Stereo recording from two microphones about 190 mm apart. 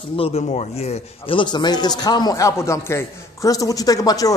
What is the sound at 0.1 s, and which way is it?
Speech, 30° left (ahead or behind).